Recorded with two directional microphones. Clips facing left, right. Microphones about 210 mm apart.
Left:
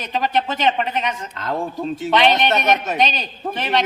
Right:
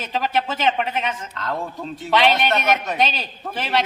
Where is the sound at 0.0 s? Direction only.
5° right (ahead or behind).